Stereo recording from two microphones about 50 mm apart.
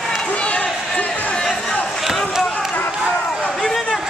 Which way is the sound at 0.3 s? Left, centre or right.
Left.